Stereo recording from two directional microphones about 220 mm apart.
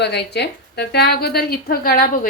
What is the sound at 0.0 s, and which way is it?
A woman's voice, 50° left (ahead or behind).